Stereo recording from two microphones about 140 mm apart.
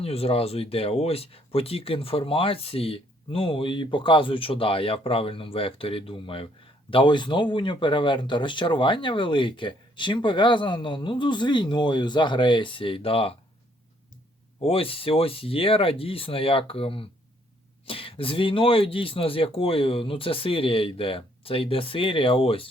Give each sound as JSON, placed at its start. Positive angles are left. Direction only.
{"t": 0.0, "sound": "speech", "side_deg": 45}
{"t": 14.6, "sound": "speech", "side_deg": 40}